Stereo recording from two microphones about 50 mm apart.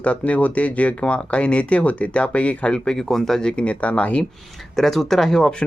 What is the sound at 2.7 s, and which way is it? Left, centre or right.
Speech, centre.